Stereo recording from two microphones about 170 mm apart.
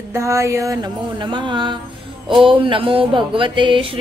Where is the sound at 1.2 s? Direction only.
30° right (ahead or behind).